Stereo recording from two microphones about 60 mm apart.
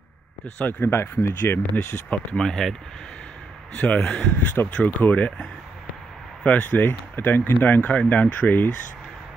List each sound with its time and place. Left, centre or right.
0.6 s speech: left
2.3 s speech: centre
3.7 s speech: left
4.4 s speech: left
6.4 s speech: left